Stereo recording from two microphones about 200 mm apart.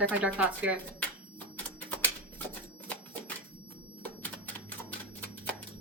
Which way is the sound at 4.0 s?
5° left (ahead or behind).